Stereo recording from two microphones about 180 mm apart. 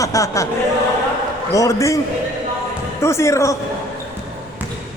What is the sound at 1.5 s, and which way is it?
Speech, 15° left (ahead or behind).